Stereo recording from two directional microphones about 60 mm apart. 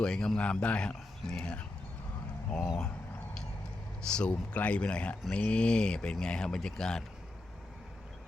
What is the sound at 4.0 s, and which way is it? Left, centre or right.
Speech, centre.